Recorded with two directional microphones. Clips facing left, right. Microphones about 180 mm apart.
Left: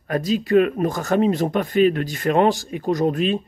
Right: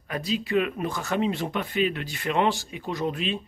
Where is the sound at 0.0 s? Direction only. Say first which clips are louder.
Left 7 dB; 45° left (ahead or behind).